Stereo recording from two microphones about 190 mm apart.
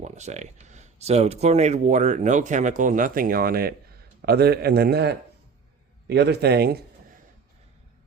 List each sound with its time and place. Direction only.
0.0 s speech: 35° right (ahead or behind); by 6.8 s 55° right (ahead or behind)